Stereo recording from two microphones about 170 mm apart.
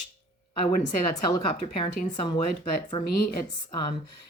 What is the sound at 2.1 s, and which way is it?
Speech, 25° left (ahead or behind).